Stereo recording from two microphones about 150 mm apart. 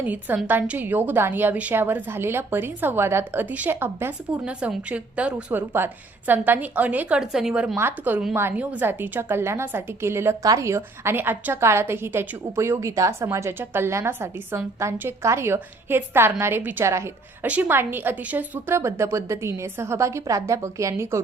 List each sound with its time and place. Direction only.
0.0 s a woman's voice: 10° right (ahead or behind)